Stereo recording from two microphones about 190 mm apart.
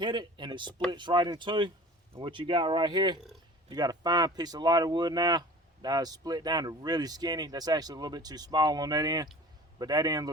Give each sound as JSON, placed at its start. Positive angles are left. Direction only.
{"t": 0.0, "sound": "speech", "side_deg": -25}